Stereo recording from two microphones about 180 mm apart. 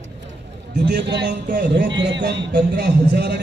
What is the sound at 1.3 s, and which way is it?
Speech, 45° right (ahead or behind).